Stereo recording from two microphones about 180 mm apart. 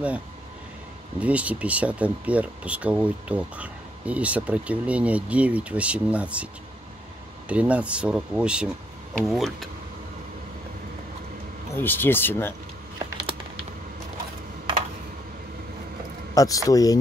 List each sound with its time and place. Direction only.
1.2 s speech: 10° right (ahead or behind)
11.7 s speech: 10° left (ahead or behind)
13.0 s a sound: 30° right (ahead or behind)
16.3 s a man's voice: 20° left (ahead or behind)